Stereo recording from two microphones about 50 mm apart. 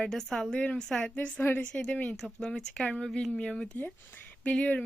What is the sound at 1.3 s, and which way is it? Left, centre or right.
Speech, left.